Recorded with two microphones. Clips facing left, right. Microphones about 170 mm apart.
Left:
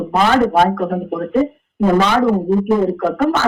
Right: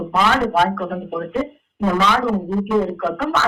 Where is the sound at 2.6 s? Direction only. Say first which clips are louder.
Left 4 dB; 45° left (ahead or behind).